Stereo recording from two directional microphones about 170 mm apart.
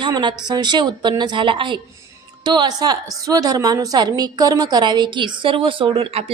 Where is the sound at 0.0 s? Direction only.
25° right (ahead or behind).